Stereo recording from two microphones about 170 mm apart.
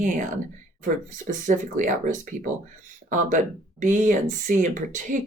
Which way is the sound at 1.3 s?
50° right (ahead or behind).